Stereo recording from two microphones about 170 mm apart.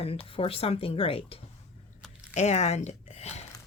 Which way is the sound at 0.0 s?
35° left (ahead or behind).